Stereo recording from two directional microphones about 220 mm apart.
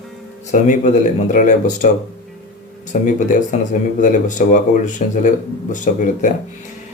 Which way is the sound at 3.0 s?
35° left (ahead or behind).